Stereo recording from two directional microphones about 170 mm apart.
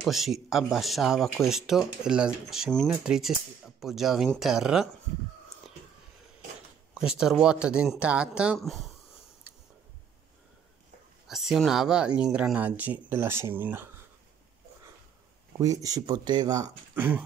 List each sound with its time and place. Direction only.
0.0 s speech: centre (ahead or behind)
6.9 s speech: 5° right (ahead or behind)
11.2 s speech: centre (ahead or behind)
15.6 s speech: 20° right (ahead or behind)
16.9 s a sound: 10° right (ahead or behind)